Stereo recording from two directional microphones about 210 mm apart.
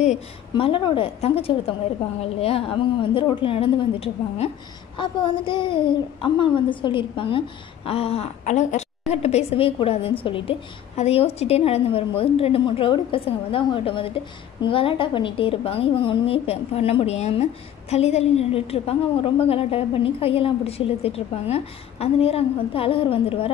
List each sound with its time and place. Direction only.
0.0 s a child's voice: 30° left (ahead or behind)